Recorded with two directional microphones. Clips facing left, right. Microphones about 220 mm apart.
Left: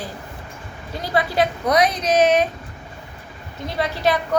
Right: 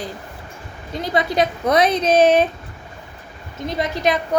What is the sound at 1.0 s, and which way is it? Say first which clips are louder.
A woman's voice: right 1 dB; 20° right (ahead or behind).